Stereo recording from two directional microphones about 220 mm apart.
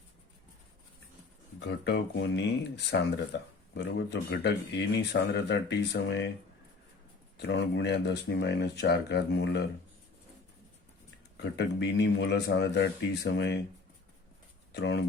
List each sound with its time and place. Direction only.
1.5 s speech: 50° left (ahead or behind)
7.3 s speech: 50° left (ahead or behind)
11.4 s speech: 55° left (ahead or behind)
14.7 s speech: 50° left (ahead or behind)